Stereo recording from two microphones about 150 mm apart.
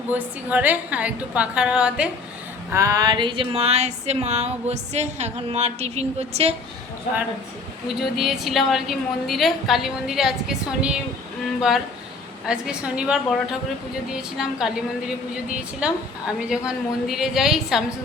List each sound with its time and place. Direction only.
0.1 s a woman's voice: 10° right (ahead or behind)
2.7 s a sound: 20° right (ahead or behind); by 6.5 s 45° right (ahead or behind)
8.1 s a woman's voice: centre (ahead or behind)
12.5 s a woman's voice: 5° right (ahead or behind)